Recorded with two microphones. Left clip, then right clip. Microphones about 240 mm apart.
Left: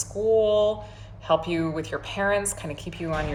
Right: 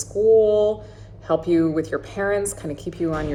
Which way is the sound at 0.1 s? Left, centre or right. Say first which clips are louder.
Right 5 dB; centre.